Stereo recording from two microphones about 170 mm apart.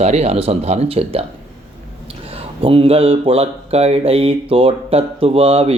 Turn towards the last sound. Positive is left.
turn(degrees=-35)  # may be behind; listen again after turning